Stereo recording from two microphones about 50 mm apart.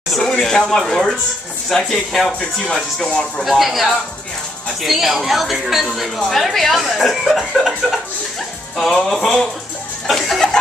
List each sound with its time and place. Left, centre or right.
0.1 s speech: centre
3.1 s speech: centre
3.4 s speech: centre
10.0 s a sound: centre